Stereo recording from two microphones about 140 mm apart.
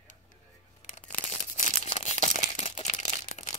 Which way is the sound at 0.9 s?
60° left (ahead or behind).